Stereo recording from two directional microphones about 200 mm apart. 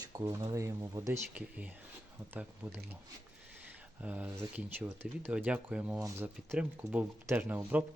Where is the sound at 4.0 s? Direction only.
5° right (ahead or behind).